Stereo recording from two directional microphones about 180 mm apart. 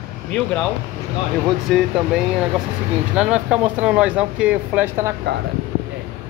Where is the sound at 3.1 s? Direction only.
5° right (ahead or behind).